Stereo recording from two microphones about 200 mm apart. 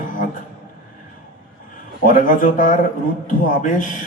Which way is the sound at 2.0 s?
40° left (ahead or behind).